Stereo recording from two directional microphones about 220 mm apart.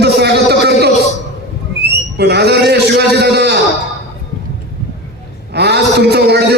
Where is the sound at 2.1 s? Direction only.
50° right (ahead or behind).